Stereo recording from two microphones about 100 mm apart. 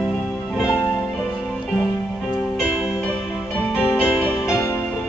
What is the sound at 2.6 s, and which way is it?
Music, 20° right (ahead or behind).